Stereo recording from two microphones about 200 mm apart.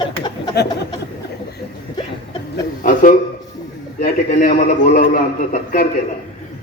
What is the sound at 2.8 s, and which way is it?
A man's voice, 45° left (ahead or behind).